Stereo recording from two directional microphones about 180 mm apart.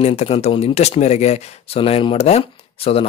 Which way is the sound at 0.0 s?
35° left (ahead or behind).